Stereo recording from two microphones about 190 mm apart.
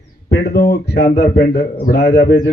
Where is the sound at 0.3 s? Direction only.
60° left (ahead or behind).